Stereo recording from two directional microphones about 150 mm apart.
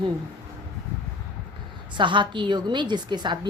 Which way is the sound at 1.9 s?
30° right (ahead or behind).